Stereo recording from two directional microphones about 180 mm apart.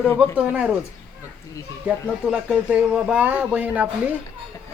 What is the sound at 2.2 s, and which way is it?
Speech, 5° right (ahead or behind).